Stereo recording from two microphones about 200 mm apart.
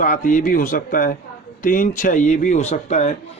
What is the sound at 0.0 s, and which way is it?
Speech, 40° left (ahead or behind).